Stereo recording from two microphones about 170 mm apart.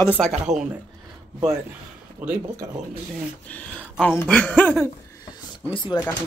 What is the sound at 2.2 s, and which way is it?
Speech, 10° right (ahead or behind).